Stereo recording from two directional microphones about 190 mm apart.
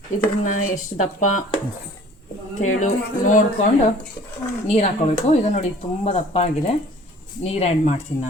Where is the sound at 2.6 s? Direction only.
40° left (ahead or behind).